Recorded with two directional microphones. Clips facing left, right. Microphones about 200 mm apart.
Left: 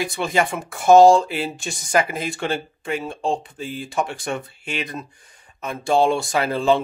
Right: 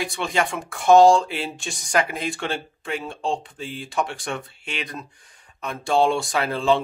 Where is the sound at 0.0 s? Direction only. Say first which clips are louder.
Left 3 dB; centre (ahead or behind).